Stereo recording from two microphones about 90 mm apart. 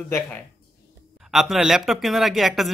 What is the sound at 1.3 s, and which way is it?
A man's voice, 5° right (ahead or behind).